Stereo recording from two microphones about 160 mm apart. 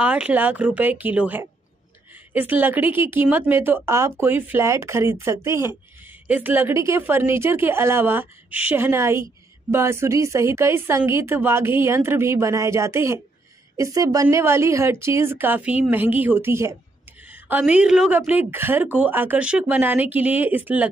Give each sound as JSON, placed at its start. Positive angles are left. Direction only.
{"t": 0.0, "sound": "a woman's voice", "side_deg": -5}